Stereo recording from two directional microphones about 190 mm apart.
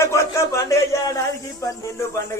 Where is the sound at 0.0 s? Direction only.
15° left (ahead or behind).